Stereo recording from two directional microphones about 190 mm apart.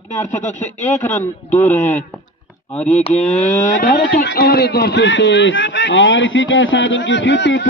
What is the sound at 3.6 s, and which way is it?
Speech, 45° left (ahead or behind).